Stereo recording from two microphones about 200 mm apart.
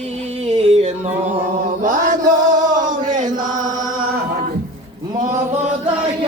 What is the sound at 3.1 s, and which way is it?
Chant, 40° right (ahead or behind).